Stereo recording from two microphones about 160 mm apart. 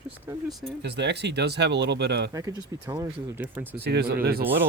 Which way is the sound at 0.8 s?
90° right.